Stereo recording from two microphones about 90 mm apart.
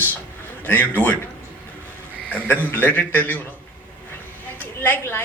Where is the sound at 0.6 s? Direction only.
20° left (ahead or behind).